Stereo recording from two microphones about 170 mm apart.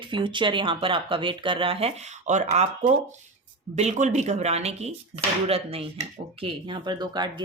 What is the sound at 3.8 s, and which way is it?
Speech, 45° right (ahead or behind).